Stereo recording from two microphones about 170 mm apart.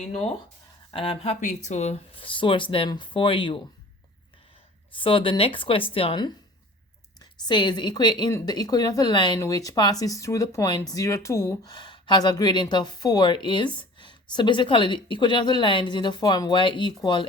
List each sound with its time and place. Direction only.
0.0 s speech: 35° left (ahead or behind)
4.9 s a woman's voice: 30° left (ahead or behind)